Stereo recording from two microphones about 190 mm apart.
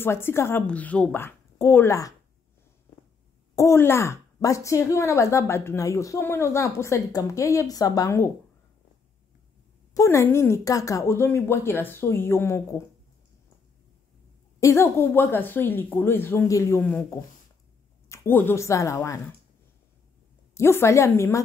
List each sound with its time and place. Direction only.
0.0 s speech: 10° left (ahead or behind)
3.5 s speech: 15° left (ahead or behind)
9.9 s speech: 15° left (ahead or behind)
14.6 s speech: 15° left (ahead or behind)
20.5 s speech: 15° left (ahead or behind)